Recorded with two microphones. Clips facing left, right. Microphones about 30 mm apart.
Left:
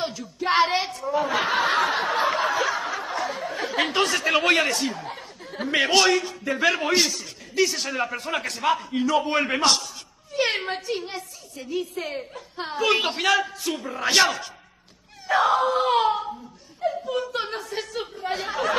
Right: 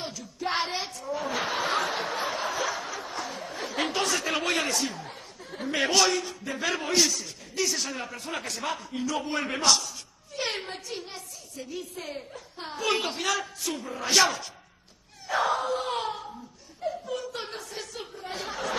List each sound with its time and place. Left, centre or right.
0.0 s a sound: left
1.3 s snicker: left
2.1 s a sound: left
4.2 s speech: left
4.7 s speech: left
6.0 s a man's voice: left
6.8 s a man's voice: left
7.8 s a woman's voice: left
16.1 s a sound: left
17.1 s speech: left